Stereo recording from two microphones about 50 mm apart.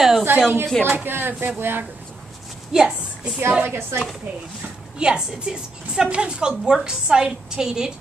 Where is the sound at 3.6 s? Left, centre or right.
Right.